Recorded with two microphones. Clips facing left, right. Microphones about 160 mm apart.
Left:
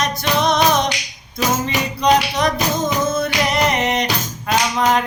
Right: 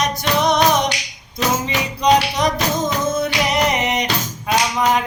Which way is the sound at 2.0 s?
15° right (ahead or behind).